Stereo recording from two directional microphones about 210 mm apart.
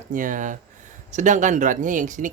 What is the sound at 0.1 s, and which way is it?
Speech, 40° right (ahead or behind).